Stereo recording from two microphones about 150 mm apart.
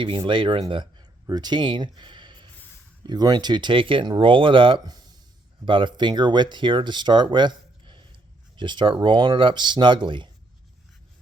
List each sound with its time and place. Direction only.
0.3 s speech: 35° right (ahead or behind)